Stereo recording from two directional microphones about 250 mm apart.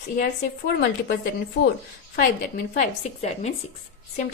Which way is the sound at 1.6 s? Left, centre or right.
Left.